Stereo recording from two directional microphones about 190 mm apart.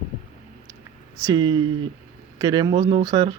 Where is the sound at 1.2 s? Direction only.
20° right (ahead or behind).